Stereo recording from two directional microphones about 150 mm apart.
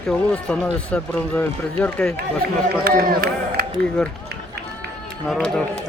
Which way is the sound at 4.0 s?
5° left (ahead or behind).